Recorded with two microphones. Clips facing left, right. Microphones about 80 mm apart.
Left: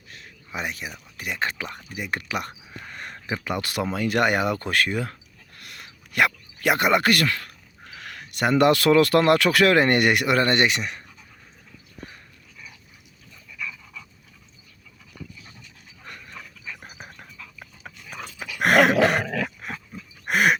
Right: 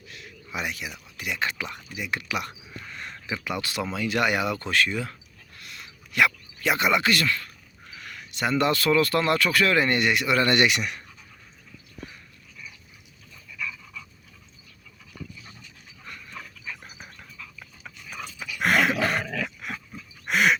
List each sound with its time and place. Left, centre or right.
0.1 s speech: left
10.3 s speech: left
13.5 s dog: centre
16.8 s frog: left
17.2 s frog: left
17.8 s pig: left
18.4 s dog: left
19.3 s dog: left
19.5 s dog: left
20.2 s dog: left